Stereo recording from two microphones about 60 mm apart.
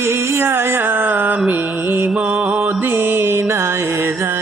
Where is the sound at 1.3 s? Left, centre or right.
Right.